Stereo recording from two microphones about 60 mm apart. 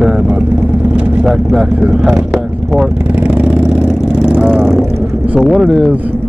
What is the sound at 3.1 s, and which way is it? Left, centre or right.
Vehicle, right.